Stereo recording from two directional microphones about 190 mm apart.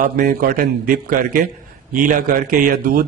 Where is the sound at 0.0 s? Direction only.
45° right (ahead or behind).